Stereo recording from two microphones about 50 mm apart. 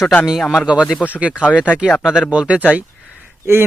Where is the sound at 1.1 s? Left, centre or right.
Right.